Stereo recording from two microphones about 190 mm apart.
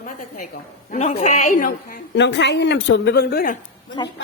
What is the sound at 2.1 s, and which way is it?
A woman's voice, 65° left (ahead or behind).